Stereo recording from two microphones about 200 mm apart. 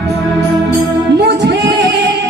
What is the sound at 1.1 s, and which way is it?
Music, 60° right (ahead or behind).